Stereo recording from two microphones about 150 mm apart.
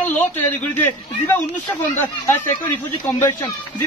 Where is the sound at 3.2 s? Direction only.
15° left (ahead or behind).